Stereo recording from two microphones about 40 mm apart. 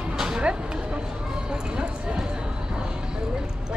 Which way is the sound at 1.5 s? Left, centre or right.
Centre.